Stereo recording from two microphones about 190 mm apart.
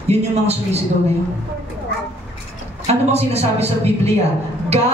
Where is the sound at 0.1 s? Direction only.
35° right (ahead or behind).